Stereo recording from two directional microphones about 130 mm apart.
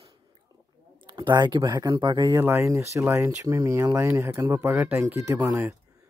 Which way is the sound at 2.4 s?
20° right (ahead or behind).